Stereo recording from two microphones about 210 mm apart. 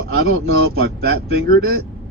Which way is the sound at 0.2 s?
45° right (ahead or behind).